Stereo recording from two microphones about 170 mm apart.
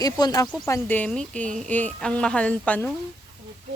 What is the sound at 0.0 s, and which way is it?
Speech, 20° left (ahead or behind).